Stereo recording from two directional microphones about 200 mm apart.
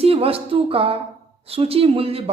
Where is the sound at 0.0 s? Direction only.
30° right (ahead or behind).